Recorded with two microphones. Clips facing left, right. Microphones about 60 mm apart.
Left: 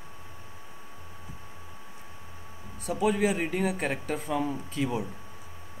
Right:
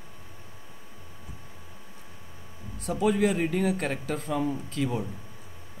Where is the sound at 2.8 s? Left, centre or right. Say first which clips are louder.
Right 1 dB; centre.